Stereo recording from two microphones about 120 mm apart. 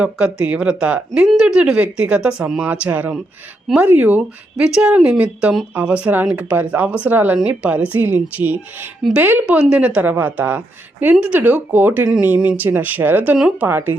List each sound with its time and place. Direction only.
0.4 s speech: 10° right (ahead or behind)